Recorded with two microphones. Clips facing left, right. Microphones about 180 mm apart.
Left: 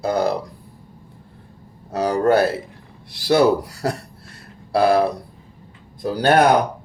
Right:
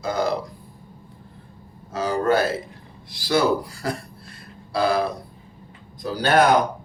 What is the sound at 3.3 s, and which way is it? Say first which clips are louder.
Speech: left 5 dB; 70° left (ahead or behind).